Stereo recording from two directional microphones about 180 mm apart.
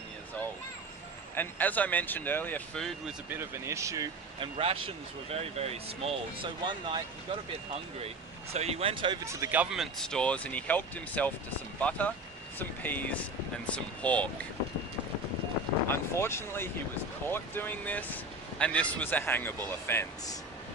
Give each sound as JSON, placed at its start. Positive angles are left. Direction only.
{"t": 1.4, "sound": "speech", "side_deg": 10}
{"t": 3.2, "sound": "speech", "side_deg": -15}
{"t": 4.5, "sound": "speech", "side_deg": -30}
{"t": 8.5, "sound": "speech", "side_deg": -35}
{"t": 9.2, "sound": "speech", "side_deg": -15}
{"t": 16.1, "sound": "speech", "side_deg": 15}